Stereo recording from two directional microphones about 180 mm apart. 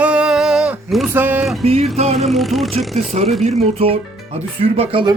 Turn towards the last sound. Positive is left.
turn(degrees=-30)  # may be behind; listen again after turning